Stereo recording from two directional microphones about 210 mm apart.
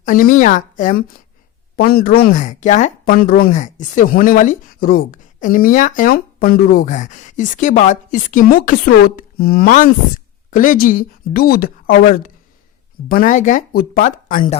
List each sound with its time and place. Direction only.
0.0 s speech: 40° left (ahead or behind)